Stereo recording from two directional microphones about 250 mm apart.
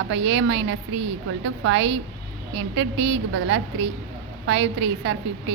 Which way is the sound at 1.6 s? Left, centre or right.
Right.